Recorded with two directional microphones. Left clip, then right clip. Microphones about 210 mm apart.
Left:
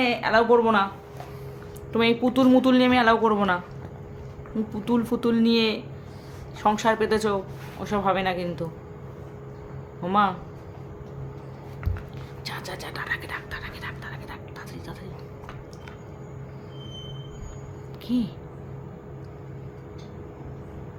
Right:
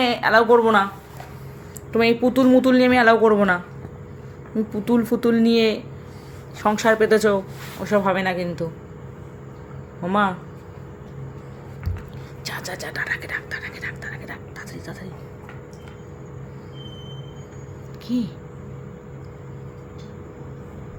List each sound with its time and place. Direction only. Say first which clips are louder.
0.0 s a woman's voice: right 4 dB; 20° right (ahead or behind)
1.9 s a woman's voice: right 4 dB; 5° right (ahead or behind)
10.0 s a woman's voice: right 1 dB; 5° right (ahead or behind)
12.5 s whispering: right 4 dB; 10° right (ahead or behind)